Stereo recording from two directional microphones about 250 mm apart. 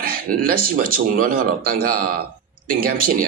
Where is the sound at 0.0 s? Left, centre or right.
Right.